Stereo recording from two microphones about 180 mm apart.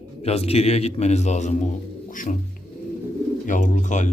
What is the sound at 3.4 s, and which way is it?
Speech, 45° left (ahead or behind).